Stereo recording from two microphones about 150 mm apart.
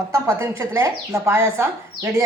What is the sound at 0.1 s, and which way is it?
A woman's voice, 20° right (ahead or behind).